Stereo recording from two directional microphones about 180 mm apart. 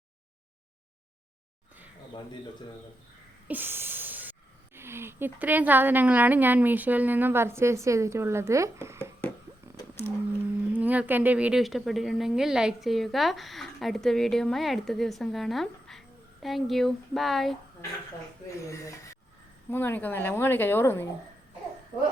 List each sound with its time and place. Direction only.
3.4 s speech: 10° right (ahead or behind)
9.7 s a sound: 15° left (ahead or behind)
10.8 s a woman's voice: 10° right (ahead or behind)
19.7 s a woman's voice: 10° left (ahead or behind)